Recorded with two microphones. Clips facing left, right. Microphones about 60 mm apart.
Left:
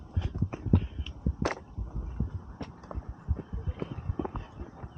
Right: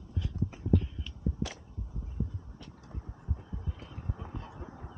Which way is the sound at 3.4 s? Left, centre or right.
Left.